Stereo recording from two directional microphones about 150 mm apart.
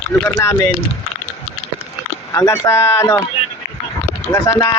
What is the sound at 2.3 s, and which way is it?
Speech, 20° left (ahead or behind).